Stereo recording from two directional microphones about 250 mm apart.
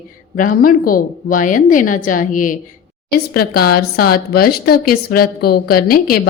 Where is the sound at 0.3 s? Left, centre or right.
Left.